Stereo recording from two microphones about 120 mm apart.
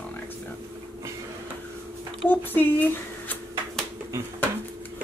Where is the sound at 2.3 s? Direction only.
15° left (ahead or behind).